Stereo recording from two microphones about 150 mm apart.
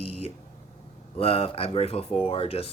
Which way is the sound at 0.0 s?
40° left (ahead or behind).